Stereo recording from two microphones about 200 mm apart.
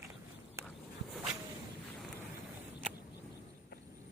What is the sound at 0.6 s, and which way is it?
Walk, 15° right (ahead or behind).